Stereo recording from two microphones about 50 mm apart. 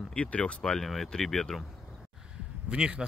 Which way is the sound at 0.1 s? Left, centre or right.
Left.